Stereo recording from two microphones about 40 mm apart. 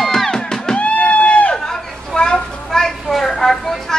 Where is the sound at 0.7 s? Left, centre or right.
Left.